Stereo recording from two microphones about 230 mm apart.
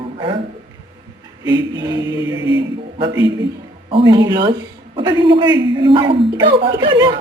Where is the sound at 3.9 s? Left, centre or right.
Centre.